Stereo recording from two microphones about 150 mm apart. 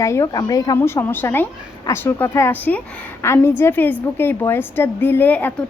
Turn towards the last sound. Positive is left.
turn(degrees=10)  # may be behind; listen again after turning